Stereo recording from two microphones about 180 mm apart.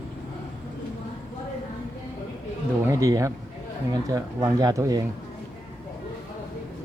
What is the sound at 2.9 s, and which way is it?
A man's voice, 20° right (ahead or behind).